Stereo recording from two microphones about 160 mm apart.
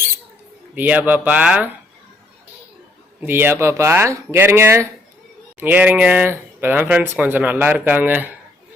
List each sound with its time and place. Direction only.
0.8 s speech: 10° right (ahead or behind)
3.2 s speech: 15° right (ahead or behind)